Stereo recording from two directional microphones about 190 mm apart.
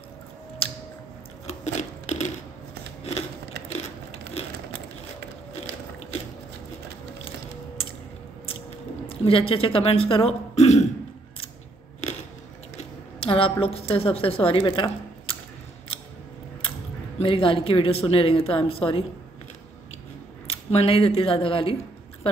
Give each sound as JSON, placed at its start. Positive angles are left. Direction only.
{"t": 0.6, "sound": "a sound", "side_deg": 30}
{"t": 3.0, "sound": "scissors", "side_deg": 35}
{"t": 4.3, "sound": "a sound", "side_deg": 35}
{"t": 9.1, "sound": "speech", "side_deg": 30}
{"t": 13.2, "sound": "a woman's voice", "side_deg": 30}
{"t": 17.2, "sound": "a woman's voice", "side_deg": 30}
{"t": 20.4, "sound": "speech", "side_deg": 30}